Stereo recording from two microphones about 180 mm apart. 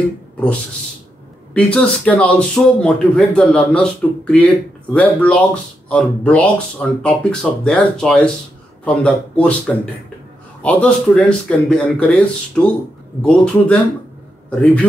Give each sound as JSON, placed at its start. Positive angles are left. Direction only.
{"t": 1.5, "sound": "speech", "side_deg": 5}